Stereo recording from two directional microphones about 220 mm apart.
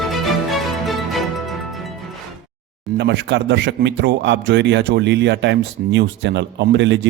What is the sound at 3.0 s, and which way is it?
A man's voice, 50° right (ahead or behind).